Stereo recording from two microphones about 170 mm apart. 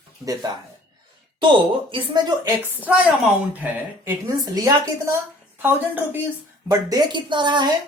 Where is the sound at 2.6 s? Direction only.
10° right (ahead or behind).